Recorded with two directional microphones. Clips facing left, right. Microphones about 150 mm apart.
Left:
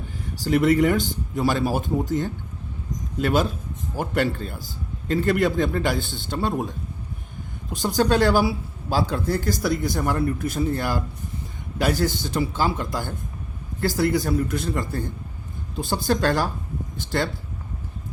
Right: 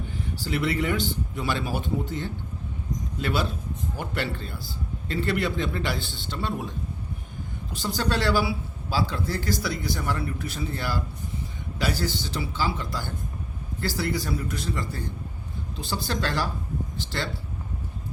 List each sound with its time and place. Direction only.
0.3 s speech: 45° left (ahead or behind)